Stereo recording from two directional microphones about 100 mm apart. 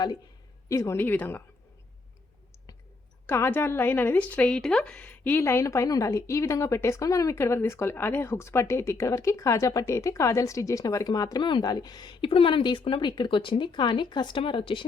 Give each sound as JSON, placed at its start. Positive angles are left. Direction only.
{"t": 0.7, "sound": "speech", "side_deg": 30}
{"t": 3.2, "sound": "speech", "side_deg": 25}
{"t": 5.4, "sound": "a woman's voice", "side_deg": 25}
{"t": 12.8, "sound": "speech", "side_deg": 55}